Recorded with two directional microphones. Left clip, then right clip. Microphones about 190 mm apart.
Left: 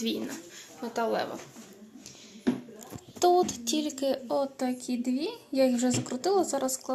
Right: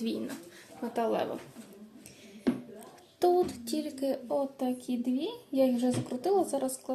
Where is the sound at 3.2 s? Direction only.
5° right (ahead or behind).